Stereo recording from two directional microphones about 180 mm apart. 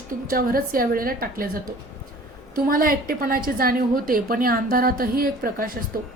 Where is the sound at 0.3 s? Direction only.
55° right (ahead or behind).